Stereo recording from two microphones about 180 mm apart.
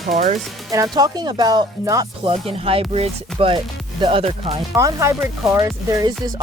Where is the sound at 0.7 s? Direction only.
20° right (ahead or behind).